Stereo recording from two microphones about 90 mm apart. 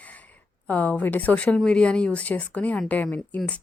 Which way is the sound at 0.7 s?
15° left (ahead or behind).